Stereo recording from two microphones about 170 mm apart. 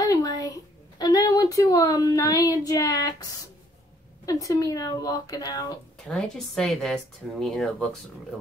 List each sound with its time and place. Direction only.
0.0 s speech: 20° left (ahead or behind)
4.3 s speech: 20° left (ahead or behind)
6.0 s speech: centre (ahead or behind)